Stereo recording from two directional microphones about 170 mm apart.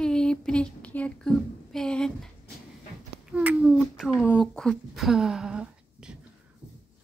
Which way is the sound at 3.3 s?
5° right (ahead or behind).